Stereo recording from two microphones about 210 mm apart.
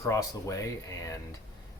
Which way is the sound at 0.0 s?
15° left (ahead or behind).